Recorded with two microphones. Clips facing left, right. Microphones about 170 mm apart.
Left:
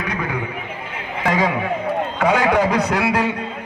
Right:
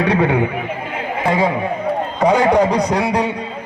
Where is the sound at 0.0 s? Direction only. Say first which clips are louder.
Right 10 dB; 30° right (ahead or behind).